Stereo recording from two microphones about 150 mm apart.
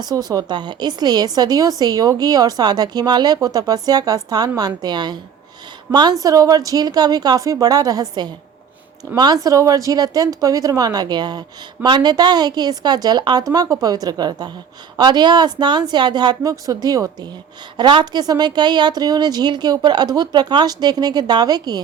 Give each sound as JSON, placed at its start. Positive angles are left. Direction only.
{"t": 0.0, "sound": "speech", "side_deg": -25}
{"t": 9.1, "sound": "speech", "side_deg": -25}